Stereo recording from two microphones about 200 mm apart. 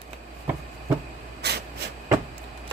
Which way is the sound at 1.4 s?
55° right (ahead or behind).